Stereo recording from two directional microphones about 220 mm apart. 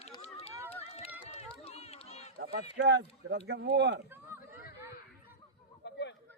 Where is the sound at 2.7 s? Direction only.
55° right (ahead or behind).